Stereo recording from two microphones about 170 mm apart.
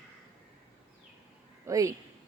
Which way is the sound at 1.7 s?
20° right (ahead or behind).